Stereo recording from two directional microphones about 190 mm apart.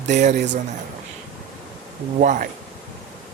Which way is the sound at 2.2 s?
40° right (ahead or behind).